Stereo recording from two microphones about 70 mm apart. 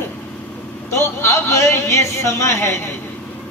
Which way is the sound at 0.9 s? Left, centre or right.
Left.